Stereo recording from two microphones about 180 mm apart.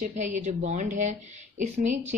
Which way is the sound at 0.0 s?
45° right (ahead or behind).